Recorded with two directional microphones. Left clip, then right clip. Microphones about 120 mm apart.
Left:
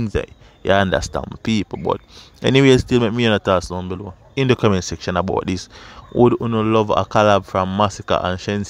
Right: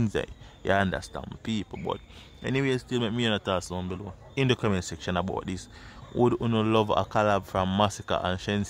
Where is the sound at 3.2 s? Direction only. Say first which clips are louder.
Left 11 dB; 60° left (ahead or behind); by 5.3 s 40° left (ahead or behind).